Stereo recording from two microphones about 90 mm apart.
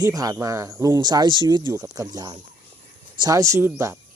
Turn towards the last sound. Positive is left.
turn(degrees=-30)  # may be behind; listen again after turning